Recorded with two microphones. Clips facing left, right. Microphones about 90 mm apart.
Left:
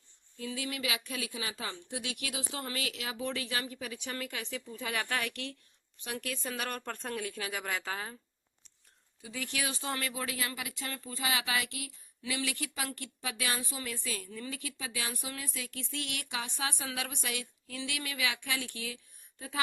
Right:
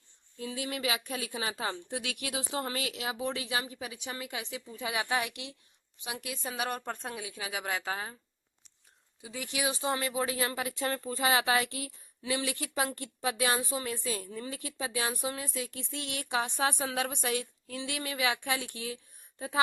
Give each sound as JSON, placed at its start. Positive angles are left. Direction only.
{"t": 0.3, "sound": "speech", "side_deg": -25}
{"t": 7.6, "sound": "speech", "side_deg": -35}
{"t": 9.2, "sound": "speech", "side_deg": -20}